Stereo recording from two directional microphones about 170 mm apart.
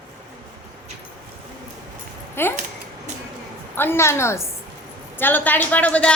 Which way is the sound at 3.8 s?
15° left (ahead or behind).